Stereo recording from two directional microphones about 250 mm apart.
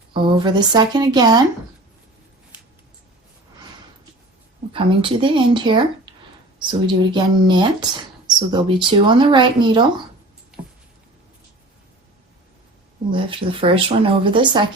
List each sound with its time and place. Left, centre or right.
0.1 s speech: centre
4.7 s speech: right
6.1 s a sound: centre
6.6 s speech: centre
10.5 s a sound: centre
13.1 s speech: centre